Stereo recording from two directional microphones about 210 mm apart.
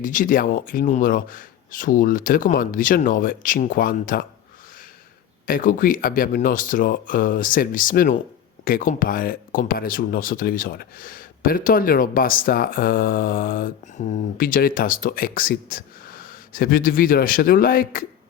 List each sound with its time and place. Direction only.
0.0 s speech: 40° left (ahead or behind)
5.5 s speech: 40° left (ahead or behind)